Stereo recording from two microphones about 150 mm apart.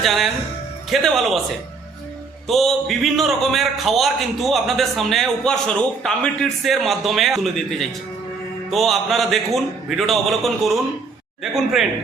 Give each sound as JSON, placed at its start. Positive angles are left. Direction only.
{"t": 0.0, "sound": "a man's voice", "side_deg": 0}
{"t": 2.5, "sound": "a man's voice", "side_deg": 0}